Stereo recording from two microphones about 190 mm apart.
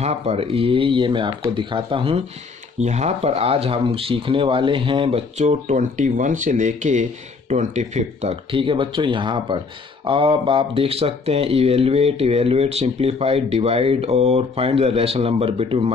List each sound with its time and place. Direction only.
0.0 s speech: 35° right (ahead or behind)